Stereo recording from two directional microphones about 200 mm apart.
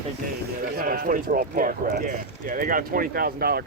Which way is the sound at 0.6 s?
45° right (ahead or behind).